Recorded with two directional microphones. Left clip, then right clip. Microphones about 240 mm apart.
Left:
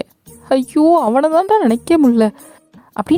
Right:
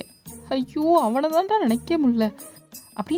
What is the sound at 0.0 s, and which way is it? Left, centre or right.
A woman's voice, left.